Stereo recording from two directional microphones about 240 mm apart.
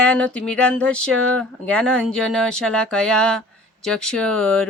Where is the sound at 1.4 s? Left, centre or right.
Centre.